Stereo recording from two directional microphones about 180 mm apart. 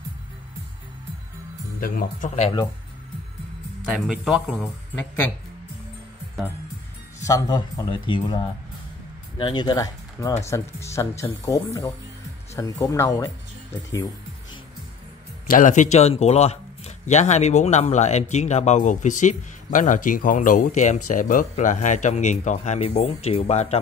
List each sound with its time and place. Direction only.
1.8 s speech: 50° left (ahead or behind)
4.1 s speech: centre (ahead or behind)
7.2 s speech: 20° left (ahead or behind)
9.4 s speech: 25° left (ahead or behind)
15.4 s a man's voice: 45° left (ahead or behind)